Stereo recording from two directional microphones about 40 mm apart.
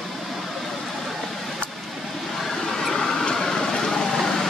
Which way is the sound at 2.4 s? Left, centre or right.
Centre.